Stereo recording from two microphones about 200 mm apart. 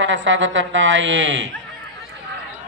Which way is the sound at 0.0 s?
70° right (ahead or behind).